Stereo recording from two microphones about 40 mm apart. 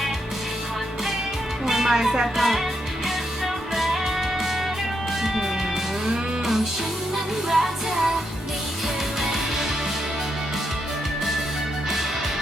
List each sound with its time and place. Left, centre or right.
1.6 s speech: centre
3.4 s music: centre
5.2 s music: centre
7.5 s music: centre
9.2 s music: centre